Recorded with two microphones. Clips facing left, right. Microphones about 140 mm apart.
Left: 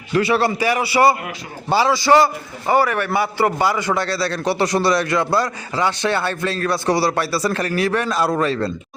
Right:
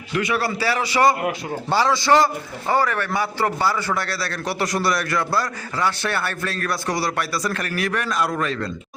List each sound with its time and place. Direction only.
0.1 s a man's voice: 30° left (ahead or behind)